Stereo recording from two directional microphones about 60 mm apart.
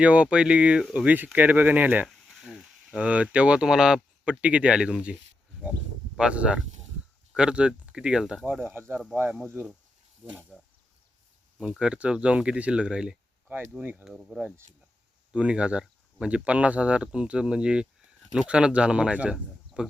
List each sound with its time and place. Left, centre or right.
0.0 s speech: right
2.0 s a sound: centre
3.0 s speech: right
6.1 s speech: centre
8.6 s speech: right
10.5 s speech: centre
11.8 s speech: centre
14.0 s speech: centre
15.3 s speech: centre